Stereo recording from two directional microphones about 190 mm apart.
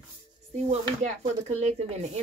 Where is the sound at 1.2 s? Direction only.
35° right (ahead or behind).